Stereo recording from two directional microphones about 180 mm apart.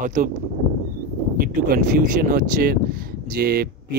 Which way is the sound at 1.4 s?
50° right (ahead or behind).